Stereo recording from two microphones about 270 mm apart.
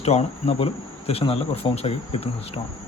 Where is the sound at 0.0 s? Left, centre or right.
Left.